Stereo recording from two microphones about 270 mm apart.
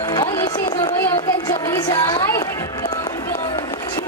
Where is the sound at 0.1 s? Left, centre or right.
Centre.